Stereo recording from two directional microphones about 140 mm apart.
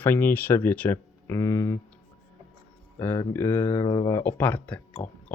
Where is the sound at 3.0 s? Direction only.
15° left (ahead or behind).